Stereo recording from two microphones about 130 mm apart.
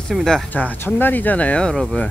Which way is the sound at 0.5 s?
15° left (ahead or behind).